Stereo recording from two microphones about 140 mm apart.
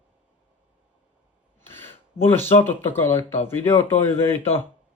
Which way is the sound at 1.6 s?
15° left (ahead or behind).